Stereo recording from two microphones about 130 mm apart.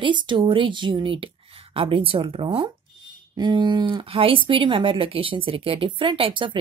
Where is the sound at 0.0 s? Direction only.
40° right (ahead or behind).